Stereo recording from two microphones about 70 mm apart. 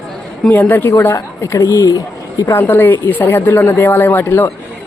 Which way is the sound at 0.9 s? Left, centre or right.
Left.